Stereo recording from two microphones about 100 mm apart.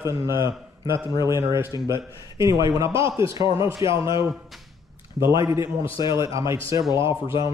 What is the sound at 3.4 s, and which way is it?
Speech, 60° left (ahead or behind).